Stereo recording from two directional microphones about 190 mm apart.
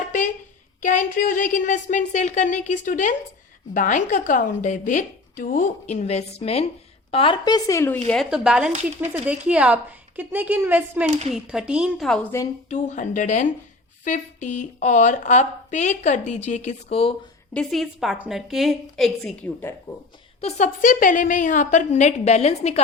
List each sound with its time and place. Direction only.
0.8 s a woman's voice: 40° left (ahead or behind)
5.9 s a woman's voice: 35° left (ahead or behind); by 7.9 s 15° left (ahead or behind)
8.0 s a woman's voice: centre (ahead or behind)
12.6 s a woman's voice: 40° left (ahead or behind)
17.5 s a woman's voice: 5° left (ahead or behind)
20.4 s a woman's voice: 40° left (ahead or behind)